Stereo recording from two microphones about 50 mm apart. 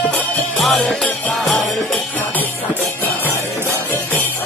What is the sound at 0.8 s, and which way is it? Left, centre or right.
Music, centre.